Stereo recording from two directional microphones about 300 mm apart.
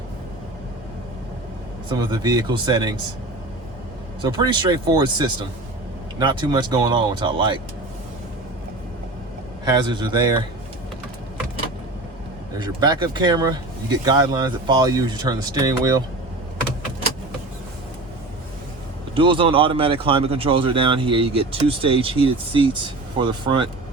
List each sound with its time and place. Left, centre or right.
1.9 s speech: centre
4.2 s speech: centre
9.6 s speech: centre
12.5 s speech: centre
19.1 s speech: centre